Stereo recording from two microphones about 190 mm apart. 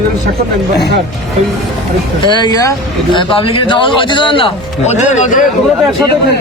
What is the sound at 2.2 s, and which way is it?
A man's voice, 25° left (ahead or behind).